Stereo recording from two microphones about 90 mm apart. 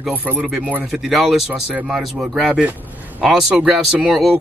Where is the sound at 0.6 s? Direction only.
10° right (ahead or behind).